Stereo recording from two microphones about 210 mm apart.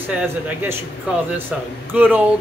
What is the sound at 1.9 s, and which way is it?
Speech, 10° right (ahead or behind).